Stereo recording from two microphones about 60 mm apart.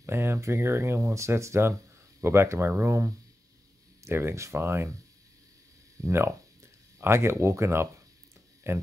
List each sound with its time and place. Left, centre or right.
0.0 s speech: right
5.9 s speech: right